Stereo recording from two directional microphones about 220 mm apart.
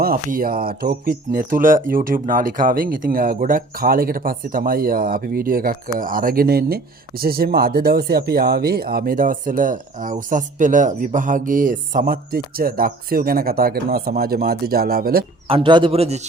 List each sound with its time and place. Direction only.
0.0 s speech: 40° right (ahead or behind)
15.4 s a man's voice: 25° right (ahead or behind)